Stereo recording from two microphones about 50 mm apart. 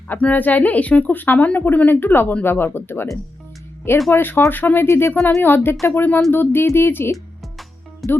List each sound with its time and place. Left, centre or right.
0.2 s speech: left
4.1 s speech: left
4.9 s speech: left
5.4 s speech: left